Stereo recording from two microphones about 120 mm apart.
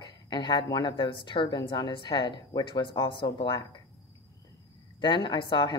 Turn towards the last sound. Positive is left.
turn(degrees=40)  # may be behind; listen again after turning